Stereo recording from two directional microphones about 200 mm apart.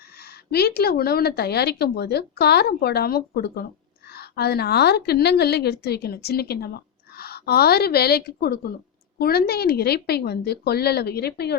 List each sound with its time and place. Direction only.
0.5 s speech: 50° left (ahead or behind)